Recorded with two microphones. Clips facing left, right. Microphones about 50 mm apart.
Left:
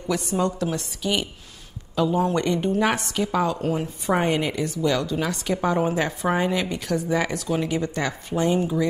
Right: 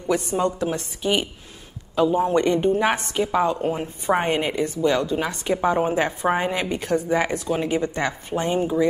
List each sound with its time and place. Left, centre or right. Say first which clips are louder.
0.1 s a woman's voice: right 2 dB; right